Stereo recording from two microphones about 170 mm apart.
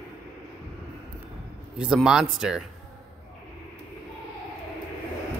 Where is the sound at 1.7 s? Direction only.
5° right (ahead or behind).